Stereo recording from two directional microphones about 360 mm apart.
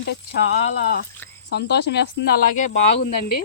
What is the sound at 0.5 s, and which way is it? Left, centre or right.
Speech, left.